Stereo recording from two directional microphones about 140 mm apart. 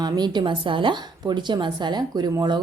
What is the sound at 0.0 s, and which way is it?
A woman's voice, 30° right (ahead or behind).